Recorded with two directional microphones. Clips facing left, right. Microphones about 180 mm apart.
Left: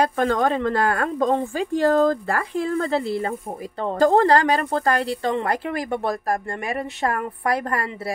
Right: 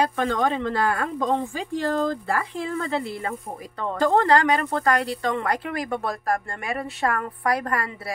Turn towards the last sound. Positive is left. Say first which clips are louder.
# left 1 dB
turn(degrees=25)  # may be behind; listen again after turning